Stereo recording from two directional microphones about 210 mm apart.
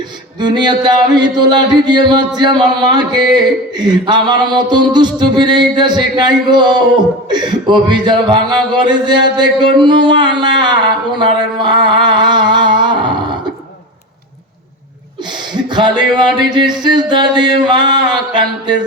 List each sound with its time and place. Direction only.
0.3 s speech: 20° right (ahead or behind)
11.2 s a sound: 20° right (ahead or behind)
15.7 s speech: 20° right (ahead or behind)